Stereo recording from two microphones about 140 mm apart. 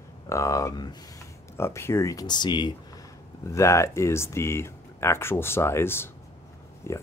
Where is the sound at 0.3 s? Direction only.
25° left (ahead or behind).